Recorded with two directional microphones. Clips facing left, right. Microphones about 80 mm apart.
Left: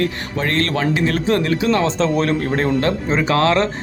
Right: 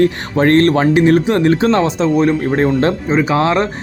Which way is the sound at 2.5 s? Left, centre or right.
Right.